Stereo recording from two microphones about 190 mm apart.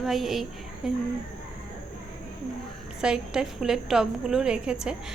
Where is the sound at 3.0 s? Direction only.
5° right (ahead or behind).